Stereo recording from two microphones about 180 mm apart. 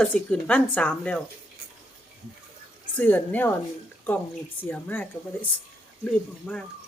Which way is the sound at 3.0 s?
10° left (ahead or behind).